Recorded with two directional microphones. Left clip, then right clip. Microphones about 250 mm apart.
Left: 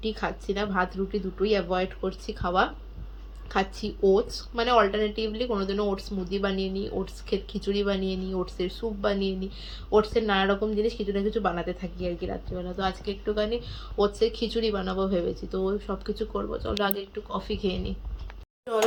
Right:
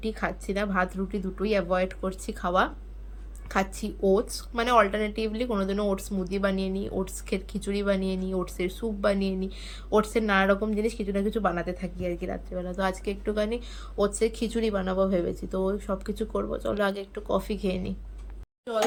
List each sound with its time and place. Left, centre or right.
0.0 s a woman's voice: centre
3.8 s speech: right
4.5 s a woman's voice: centre